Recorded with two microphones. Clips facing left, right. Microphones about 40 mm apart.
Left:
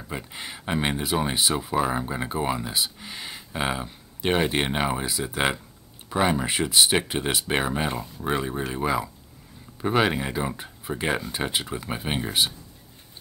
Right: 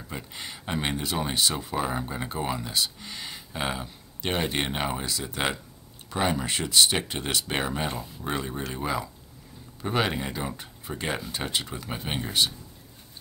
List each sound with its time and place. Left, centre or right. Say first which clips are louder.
0.1 s speech: left 3 dB; centre